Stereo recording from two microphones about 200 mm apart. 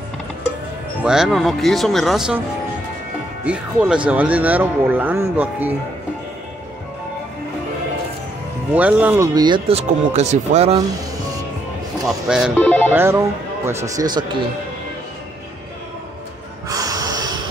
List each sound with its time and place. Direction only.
1.0 s speech: centre (ahead or behind)
3.4 s speech: 5° right (ahead or behind)
8.7 s speech: 5° right (ahead or behind)
9.3 s speech: 20° right (ahead or behind)
12.3 s speech: 5° right (ahead or behind)
12.5 s speech: 10° left (ahead or behind)
12.9 s speech: 10° right (ahead or behind)
16.6 s gasp: 20° right (ahead or behind)